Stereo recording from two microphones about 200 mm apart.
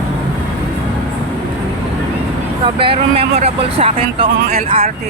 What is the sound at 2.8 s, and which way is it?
Speech, 25° right (ahead or behind).